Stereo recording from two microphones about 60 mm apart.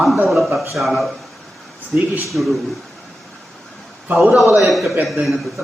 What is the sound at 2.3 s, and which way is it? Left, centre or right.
Speech, centre.